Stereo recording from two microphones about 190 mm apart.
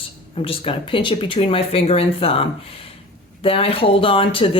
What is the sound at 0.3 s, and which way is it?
Speech, 30° left (ahead or behind).